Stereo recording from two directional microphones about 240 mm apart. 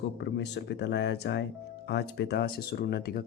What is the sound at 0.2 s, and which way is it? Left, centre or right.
Speech, left.